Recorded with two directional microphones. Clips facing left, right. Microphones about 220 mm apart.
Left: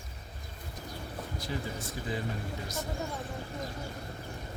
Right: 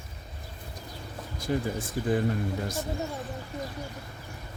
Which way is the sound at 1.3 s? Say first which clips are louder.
Right 9 dB; 50° right (ahead or behind).